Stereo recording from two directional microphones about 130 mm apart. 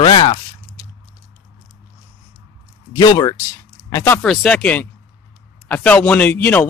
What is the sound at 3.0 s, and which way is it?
Speech, 30° left (ahead or behind).